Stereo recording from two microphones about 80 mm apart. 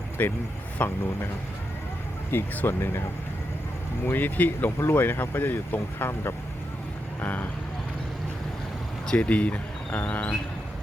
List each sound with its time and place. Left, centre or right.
0.2 s speech: left
2.3 s speech: left
4.0 s speech: left
7.2 s speech: left
9.0 s speech: centre